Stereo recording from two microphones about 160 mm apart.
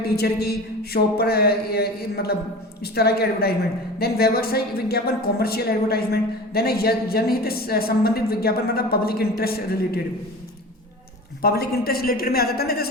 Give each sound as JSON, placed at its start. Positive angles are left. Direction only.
{"t": 0.0, "sound": "a woman's voice", "side_deg": 85}
{"t": 11.4, "sound": "a woman's voice", "side_deg": 75}